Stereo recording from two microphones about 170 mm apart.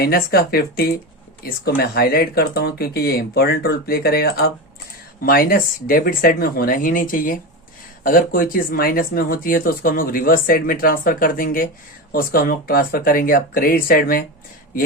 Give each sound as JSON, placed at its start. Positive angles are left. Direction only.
{"t": 0.0, "sound": "speech", "side_deg": 65}